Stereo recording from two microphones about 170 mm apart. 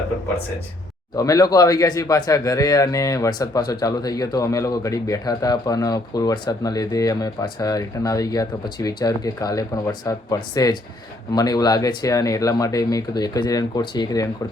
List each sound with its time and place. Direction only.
1.1 s speech: 20° left (ahead or behind)